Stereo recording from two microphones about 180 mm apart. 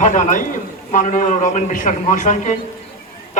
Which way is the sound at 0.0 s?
45° left (ahead or behind).